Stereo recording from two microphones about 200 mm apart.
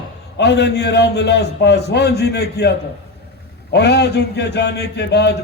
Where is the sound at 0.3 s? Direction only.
60° left (ahead or behind).